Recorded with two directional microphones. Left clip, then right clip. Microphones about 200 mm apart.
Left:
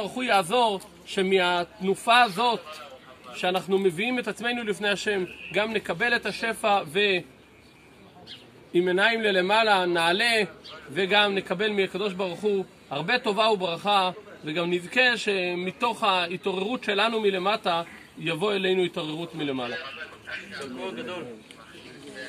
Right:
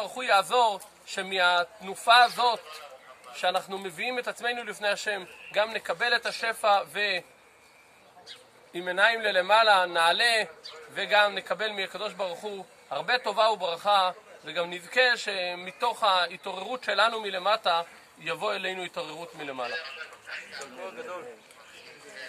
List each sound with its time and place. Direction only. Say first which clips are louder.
0.0 s a man's voice: left 1 dB; centre (ahead or behind)
8.7 s a man's voice: left 2 dB; centre (ahead or behind)
20.8 s a man's voice: left 3 dB; 40° right (ahead or behind)